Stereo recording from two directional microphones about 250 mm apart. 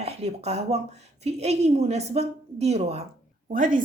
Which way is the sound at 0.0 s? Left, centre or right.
Right.